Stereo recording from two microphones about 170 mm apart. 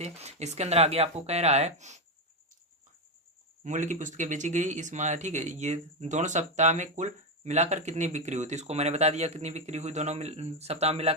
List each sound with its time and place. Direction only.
0.0 s speech: 40° right (ahead or behind)
3.6 s speech: 45° right (ahead or behind)